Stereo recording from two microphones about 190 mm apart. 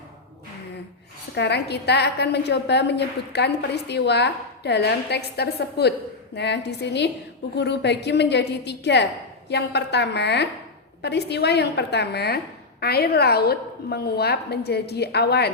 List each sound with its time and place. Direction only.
1.4 s a woman's voice: 60° left (ahead or behind)